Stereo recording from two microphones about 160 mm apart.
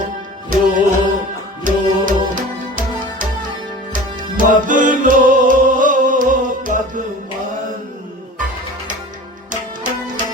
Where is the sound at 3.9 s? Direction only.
55° right (ahead or behind).